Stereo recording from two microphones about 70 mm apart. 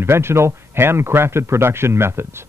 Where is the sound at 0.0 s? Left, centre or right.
Right.